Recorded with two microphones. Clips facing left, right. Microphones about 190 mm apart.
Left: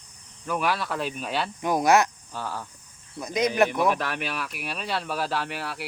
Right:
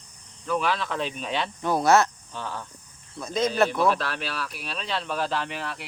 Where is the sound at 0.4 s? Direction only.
10° left (ahead or behind).